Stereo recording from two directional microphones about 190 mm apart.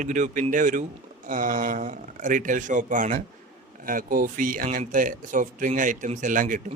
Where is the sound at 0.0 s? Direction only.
40° right (ahead or behind).